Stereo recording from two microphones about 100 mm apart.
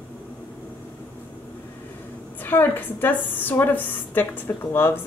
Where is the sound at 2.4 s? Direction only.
20° left (ahead or behind).